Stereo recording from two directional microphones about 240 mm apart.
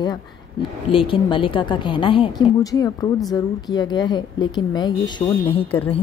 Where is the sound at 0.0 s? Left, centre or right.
Centre.